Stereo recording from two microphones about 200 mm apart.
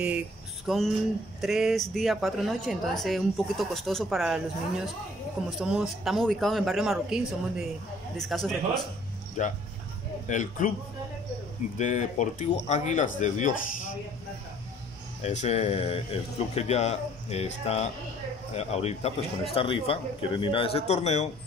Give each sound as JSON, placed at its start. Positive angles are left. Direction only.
{"t": 0.7, "sound": "speech", "side_deg": 0}
{"t": 9.4, "sound": "speech", "side_deg": 40}
{"t": 11.8, "sound": "speech", "side_deg": 35}
{"t": 15.2, "sound": "speech", "side_deg": 35}